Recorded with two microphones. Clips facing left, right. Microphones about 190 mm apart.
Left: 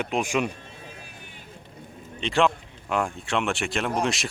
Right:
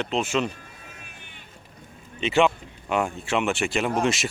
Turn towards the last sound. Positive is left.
turn(degrees=0)  # may be behind; listen again after turning